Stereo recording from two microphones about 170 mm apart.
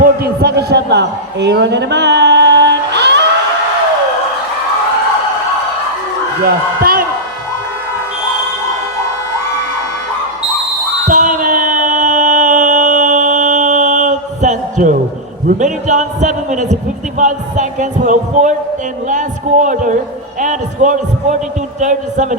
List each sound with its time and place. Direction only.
0.0 s a man's voice: 65° right (ahead or behind); by 3.2 s 90° right
6.4 s speech: 60° right (ahead or behind)
11.1 s music: 50° right (ahead or behind)
15.5 s speech: 45° right (ahead or behind)